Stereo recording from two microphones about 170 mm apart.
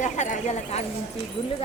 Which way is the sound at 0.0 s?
45° left (ahead or behind).